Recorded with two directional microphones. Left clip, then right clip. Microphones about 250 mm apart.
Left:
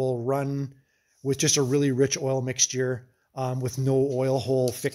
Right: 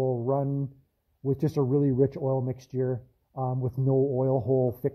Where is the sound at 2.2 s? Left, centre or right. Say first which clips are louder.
Left 4 dB; left.